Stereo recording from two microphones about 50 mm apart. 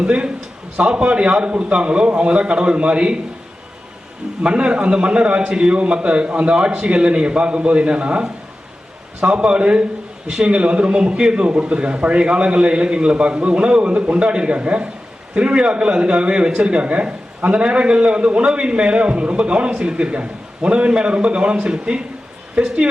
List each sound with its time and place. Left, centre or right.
0.0 s speech: right
4.4 s speech: right